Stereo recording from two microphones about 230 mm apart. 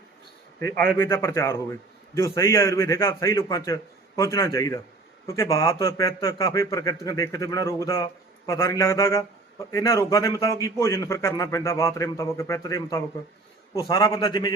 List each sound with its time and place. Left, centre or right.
0.9 s a man's voice: centre